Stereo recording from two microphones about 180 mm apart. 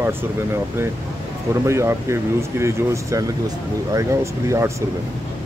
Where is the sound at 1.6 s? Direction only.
15° right (ahead or behind).